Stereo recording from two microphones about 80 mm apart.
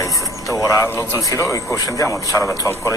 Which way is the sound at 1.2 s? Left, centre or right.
Left.